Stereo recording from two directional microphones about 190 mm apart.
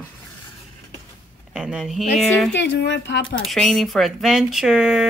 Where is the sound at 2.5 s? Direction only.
65° left (ahead or behind).